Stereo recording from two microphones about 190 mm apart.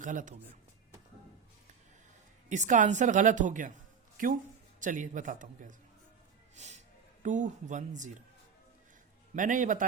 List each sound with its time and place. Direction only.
0.0 s a man's voice: 45° right (ahead or behind)
2.5 s a woman's voice: 40° right (ahead or behind)
4.8 s a man's voice: 40° right (ahead or behind)
9.3 s a man's voice: 45° right (ahead or behind)